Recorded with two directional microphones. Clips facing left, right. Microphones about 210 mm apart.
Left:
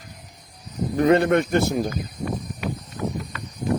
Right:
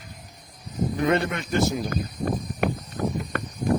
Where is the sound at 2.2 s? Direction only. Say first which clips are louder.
Right 4 dB; 50° right (ahead or behind).